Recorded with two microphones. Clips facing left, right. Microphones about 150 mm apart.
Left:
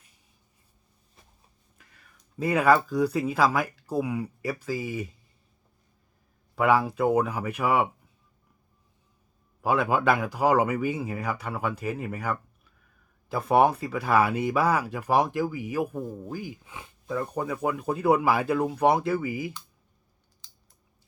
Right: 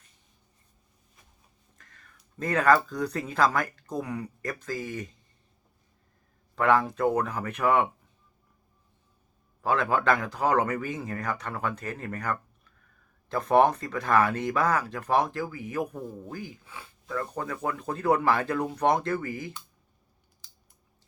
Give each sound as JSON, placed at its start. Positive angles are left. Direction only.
{"t": 1.8, "sound": "speech", "side_deg": 10}
{"t": 6.6, "sound": "speech", "side_deg": 10}
{"t": 9.6, "sound": "speech", "side_deg": 10}